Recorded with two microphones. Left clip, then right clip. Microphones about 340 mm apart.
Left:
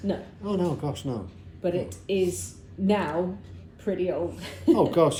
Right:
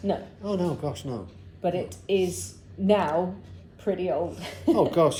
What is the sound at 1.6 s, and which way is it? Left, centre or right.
A woman's voice, right.